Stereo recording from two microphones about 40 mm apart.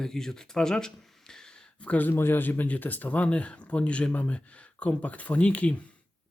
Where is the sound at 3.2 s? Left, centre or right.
Left.